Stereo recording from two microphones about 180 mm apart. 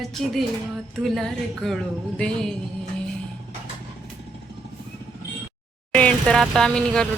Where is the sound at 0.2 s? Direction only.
Centre (ahead or behind).